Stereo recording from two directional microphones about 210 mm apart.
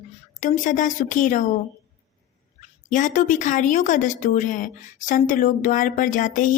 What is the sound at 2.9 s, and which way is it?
Speech, 35° left (ahead or behind).